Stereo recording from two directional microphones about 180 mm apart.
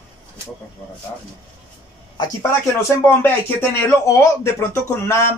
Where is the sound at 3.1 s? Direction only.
10° left (ahead or behind).